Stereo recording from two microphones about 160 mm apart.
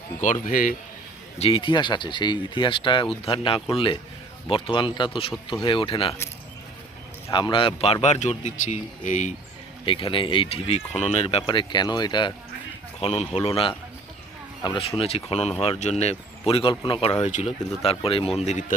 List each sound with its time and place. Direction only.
0.2 s a man's voice: 50° left (ahead or behind)
1.4 s speech: 35° left (ahead or behind)
7.3 s speech: 30° left (ahead or behind)
8.0 s speech: 45° left (ahead or behind)
9.8 s speech: 35° left (ahead or behind)
13.0 s speech: 40° left (ahead or behind)
14.6 s speech: 30° left (ahead or behind)